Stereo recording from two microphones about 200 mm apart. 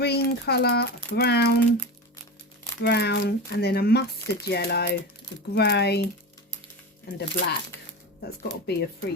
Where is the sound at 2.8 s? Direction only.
55° left (ahead or behind).